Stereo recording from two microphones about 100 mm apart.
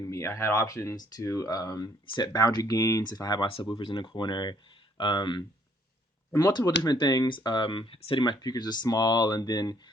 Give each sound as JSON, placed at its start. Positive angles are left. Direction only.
{"t": 0.0, "sound": "speech", "side_deg": 30}
{"t": 3.4, "sound": "speech", "side_deg": 55}
{"t": 6.5, "sound": "speech", "side_deg": 40}